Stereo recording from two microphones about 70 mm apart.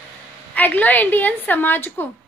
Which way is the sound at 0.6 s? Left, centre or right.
Left.